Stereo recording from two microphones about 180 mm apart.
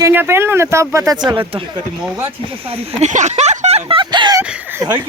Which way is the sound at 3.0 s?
40° right (ahead or behind).